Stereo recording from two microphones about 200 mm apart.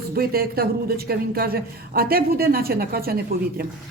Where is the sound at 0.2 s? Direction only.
50° right (ahead or behind).